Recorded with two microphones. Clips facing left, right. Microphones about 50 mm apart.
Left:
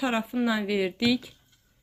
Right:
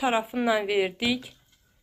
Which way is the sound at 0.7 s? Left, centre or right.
Right.